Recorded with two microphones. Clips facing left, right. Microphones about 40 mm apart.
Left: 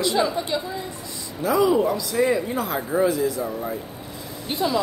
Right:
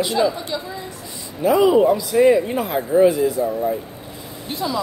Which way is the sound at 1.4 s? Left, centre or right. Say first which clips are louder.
Right 5 dB; right.